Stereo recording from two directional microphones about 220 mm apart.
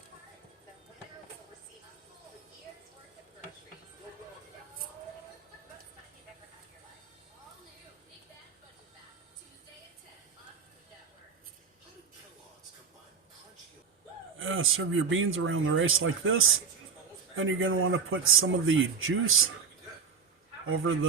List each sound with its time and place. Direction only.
14.3 s a man's voice: 65° right (ahead or behind)
20.7 s a man's voice: 65° right (ahead or behind)